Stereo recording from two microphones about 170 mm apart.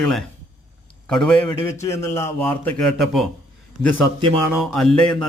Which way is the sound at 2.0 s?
15° left (ahead or behind).